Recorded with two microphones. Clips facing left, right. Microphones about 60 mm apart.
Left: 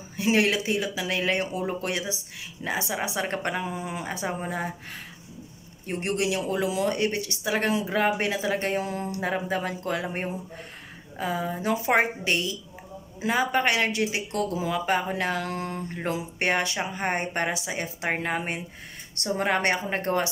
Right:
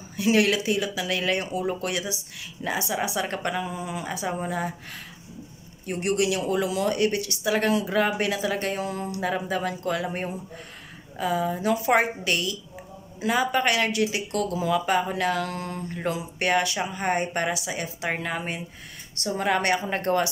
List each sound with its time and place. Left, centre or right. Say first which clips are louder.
0.2 s speech: right 2 dB; left
4.4 s speech: right 2 dB; centre
5.9 s speech: right 2 dB; left